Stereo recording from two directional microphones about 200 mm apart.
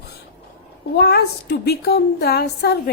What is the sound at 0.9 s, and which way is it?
A woman's voice, 50° left (ahead or behind).